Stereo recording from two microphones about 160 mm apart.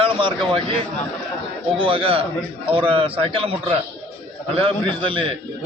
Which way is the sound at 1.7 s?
35° right (ahead or behind).